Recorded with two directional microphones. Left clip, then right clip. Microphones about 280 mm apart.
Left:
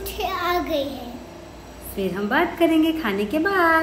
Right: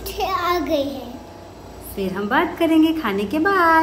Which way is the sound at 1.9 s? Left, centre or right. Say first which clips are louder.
Right 2 dB; centre.